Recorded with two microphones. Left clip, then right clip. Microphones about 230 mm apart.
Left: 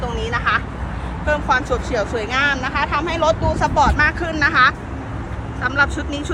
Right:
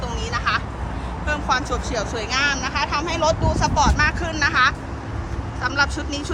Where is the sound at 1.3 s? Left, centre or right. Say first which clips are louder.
Left 4 dB; centre.